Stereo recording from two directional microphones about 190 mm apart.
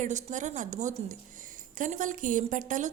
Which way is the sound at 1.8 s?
45° right (ahead or behind).